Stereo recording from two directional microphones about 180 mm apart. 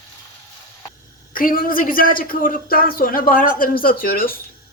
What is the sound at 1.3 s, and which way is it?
A woman's voice, 50° left (ahead or behind).